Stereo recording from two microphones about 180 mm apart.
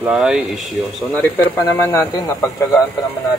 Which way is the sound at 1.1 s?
15° left (ahead or behind).